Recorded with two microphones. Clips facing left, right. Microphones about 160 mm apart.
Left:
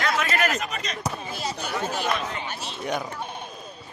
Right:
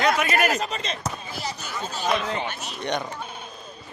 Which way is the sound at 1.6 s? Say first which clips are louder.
Left 4 dB; 65° left (ahead or behind).